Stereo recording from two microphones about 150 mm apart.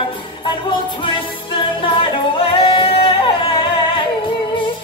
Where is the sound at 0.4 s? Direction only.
35° left (ahead or behind).